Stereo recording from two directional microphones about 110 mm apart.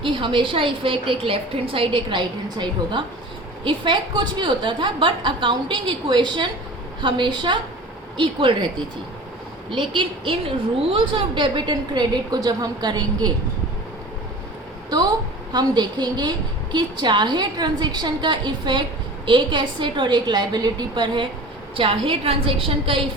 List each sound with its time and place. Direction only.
0.0 s a woman's voice: 50° right (ahead or behind)
9.7 s a woman's voice: 50° right (ahead or behind)
14.8 s a woman's voice: 40° right (ahead or behind)
21.8 s a woman's voice: 55° right (ahead or behind)